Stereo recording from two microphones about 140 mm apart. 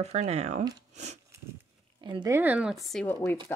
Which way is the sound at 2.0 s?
30° right (ahead or behind).